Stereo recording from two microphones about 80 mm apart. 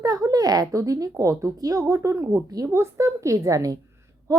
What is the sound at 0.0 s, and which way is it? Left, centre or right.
A woman's voice, right.